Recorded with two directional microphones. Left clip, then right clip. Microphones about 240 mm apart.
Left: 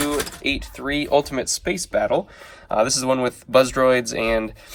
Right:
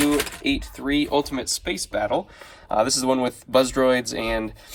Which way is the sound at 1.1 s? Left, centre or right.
Right.